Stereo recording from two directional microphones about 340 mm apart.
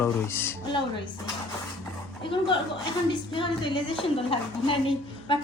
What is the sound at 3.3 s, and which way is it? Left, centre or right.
A woman's voice, centre.